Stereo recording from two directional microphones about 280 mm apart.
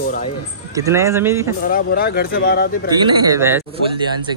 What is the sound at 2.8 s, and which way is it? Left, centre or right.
Speech, centre.